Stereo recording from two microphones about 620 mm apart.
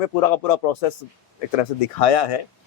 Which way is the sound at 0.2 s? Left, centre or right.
Left.